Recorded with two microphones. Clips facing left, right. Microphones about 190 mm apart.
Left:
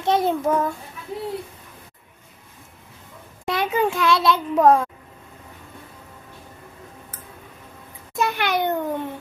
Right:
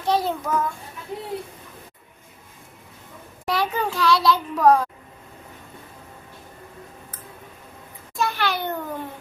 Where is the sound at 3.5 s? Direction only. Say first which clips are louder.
Left 3 dB; 20° left (ahead or behind).